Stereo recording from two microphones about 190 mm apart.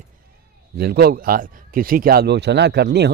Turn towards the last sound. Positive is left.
turn(degrees=-60)  # may be behind; listen again after turning